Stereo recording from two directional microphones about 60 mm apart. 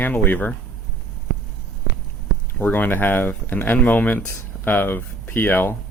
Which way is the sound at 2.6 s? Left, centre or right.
Left.